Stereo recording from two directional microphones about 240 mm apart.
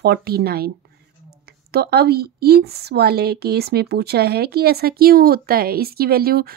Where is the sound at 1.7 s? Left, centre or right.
Right.